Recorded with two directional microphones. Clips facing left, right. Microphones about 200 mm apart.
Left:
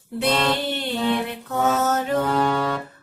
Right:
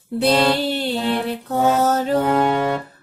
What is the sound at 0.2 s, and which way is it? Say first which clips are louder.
Music: right 5 dB; 35° right (ahead or behind).